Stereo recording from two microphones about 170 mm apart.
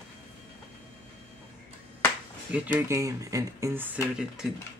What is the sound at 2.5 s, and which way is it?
Speech, 10° right (ahead or behind).